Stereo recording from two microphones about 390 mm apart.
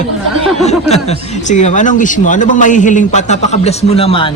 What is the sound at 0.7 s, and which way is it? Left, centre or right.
Speech, centre.